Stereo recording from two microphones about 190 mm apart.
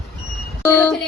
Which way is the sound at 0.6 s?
15° left (ahead or behind).